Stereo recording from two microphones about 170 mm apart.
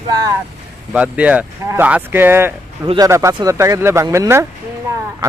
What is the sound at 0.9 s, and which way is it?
A man's voice, 5° right (ahead or behind).